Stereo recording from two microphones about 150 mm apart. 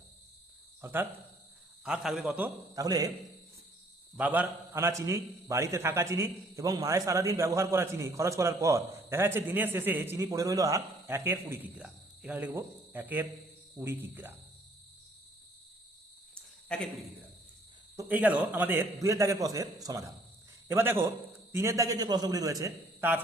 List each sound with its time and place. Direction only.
0.8 s speech: 15° right (ahead or behind)
1.8 s a man's voice: centre (ahead or behind)
2.7 s a man's voice: 25° right (ahead or behind)
4.2 s a man's voice: 10° right (ahead or behind)
17.9 s a man's voice: 10° right (ahead or behind)